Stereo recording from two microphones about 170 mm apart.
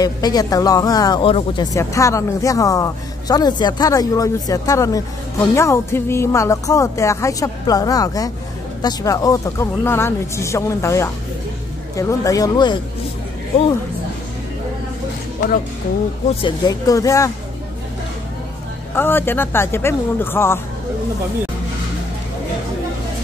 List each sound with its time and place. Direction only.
0.0 s speech: 25° left (ahead or behind)
1.7 s a woman's voice: 20° left (ahead or behind)
16.3 s speech: 25° left (ahead or behind)
18.9 s a woman's voice: 15° left (ahead or behind)